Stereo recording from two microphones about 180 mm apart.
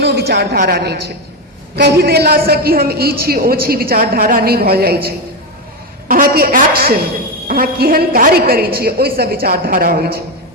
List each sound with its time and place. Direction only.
0.0 s a woman's voice: 65° right (ahead or behind)